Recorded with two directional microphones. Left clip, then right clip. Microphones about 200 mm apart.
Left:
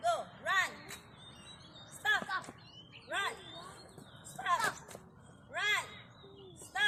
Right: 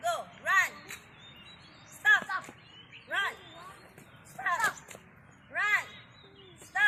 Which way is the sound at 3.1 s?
20° left (ahead or behind).